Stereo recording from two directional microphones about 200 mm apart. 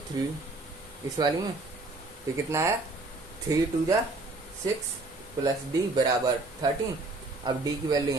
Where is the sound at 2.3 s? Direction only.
15° right (ahead or behind).